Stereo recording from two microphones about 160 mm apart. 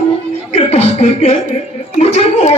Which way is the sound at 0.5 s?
40° left (ahead or behind).